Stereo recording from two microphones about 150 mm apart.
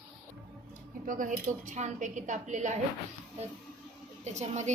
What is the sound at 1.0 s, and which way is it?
A woman's voice, 60° right (ahead or behind).